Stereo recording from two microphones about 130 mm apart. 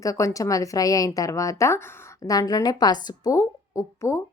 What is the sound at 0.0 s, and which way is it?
A woman's voice, 25° left (ahead or behind).